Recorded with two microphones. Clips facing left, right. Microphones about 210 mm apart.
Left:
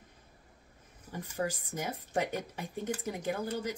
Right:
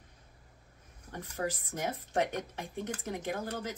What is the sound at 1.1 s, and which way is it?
Speech, centre (ahead or behind).